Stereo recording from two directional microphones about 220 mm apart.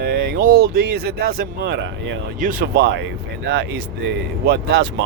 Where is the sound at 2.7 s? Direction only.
50° right (ahead or behind).